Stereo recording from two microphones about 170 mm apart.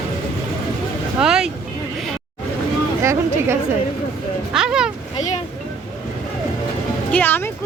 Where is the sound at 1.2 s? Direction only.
5° right (ahead or behind).